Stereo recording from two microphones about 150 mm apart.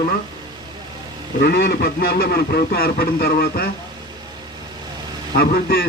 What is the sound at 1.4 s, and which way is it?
Speech, 90° left.